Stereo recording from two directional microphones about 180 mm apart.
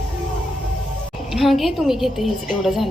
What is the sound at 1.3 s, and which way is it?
A woman's voice, centre (ahead or behind).